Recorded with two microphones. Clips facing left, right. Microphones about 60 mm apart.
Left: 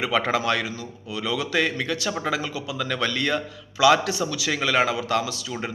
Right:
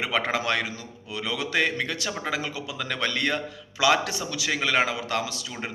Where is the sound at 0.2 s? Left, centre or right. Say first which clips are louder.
Left 1 dB; right.